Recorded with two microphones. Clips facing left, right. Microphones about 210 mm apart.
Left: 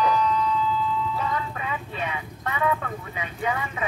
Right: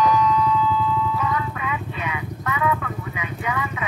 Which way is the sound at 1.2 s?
30° left (ahead or behind).